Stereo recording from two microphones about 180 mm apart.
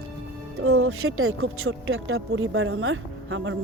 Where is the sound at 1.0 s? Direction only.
90° right.